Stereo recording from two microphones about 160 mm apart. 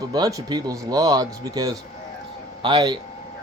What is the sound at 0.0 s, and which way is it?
Speech, 20° right (ahead or behind).